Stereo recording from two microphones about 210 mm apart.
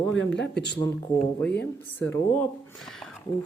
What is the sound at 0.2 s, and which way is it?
Speech, 55° left (ahead or behind).